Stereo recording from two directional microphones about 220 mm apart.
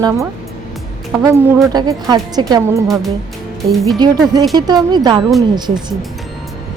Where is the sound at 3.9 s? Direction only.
20° right (ahead or behind).